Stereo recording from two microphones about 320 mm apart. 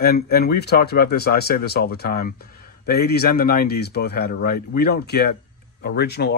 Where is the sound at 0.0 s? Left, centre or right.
Left.